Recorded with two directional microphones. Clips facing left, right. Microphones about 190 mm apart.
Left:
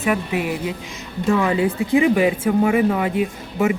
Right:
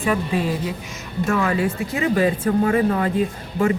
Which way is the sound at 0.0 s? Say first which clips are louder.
Even; 10° left (ahead or behind).